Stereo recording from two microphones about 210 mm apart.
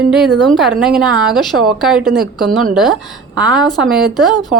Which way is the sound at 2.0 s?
45° right (ahead or behind).